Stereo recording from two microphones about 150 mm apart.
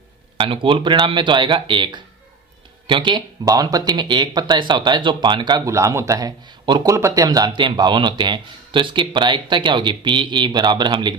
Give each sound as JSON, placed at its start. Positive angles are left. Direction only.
{"t": 0.3, "sound": "speech", "side_deg": -35}